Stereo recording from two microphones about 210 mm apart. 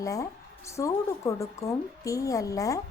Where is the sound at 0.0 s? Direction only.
15° left (ahead or behind).